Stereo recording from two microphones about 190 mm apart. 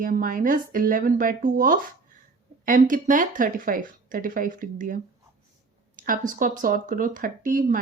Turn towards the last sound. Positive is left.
turn(degrees=-45)  # may be behind; listen again after turning